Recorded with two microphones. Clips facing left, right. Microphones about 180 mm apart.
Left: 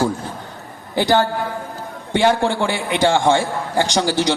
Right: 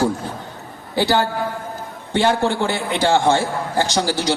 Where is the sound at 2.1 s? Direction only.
15° left (ahead or behind).